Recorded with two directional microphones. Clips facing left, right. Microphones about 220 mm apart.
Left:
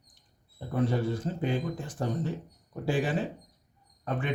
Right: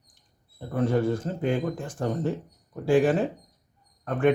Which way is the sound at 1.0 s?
50° right (ahead or behind).